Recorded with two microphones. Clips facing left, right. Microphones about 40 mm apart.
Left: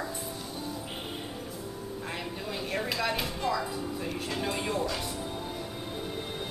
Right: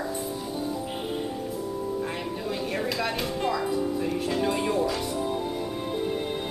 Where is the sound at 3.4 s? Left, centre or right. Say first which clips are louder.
Right 5 dB; centre.